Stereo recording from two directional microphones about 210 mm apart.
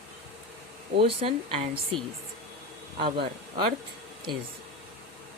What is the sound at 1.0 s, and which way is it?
Speech, 25° right (ahead or behind).